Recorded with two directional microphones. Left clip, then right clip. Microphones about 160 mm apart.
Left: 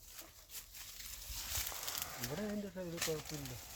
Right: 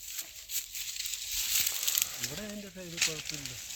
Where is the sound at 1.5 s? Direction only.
10° right (ahead or behind).